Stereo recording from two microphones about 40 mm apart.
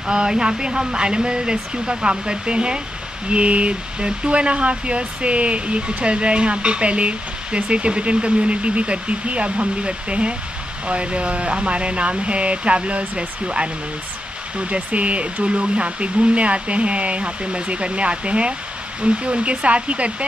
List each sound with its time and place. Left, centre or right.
0.0 s speech: centre